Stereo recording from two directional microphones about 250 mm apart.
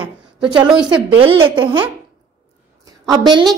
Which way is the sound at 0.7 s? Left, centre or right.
Centre.